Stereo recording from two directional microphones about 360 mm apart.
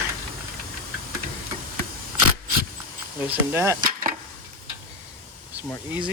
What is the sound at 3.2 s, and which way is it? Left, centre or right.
Speech, centre.